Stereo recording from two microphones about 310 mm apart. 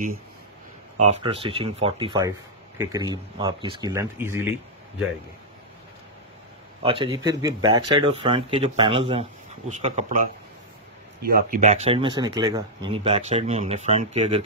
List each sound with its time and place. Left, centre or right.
0.9 s speech: right
6.8 s speech: centre
11.2 s speech: right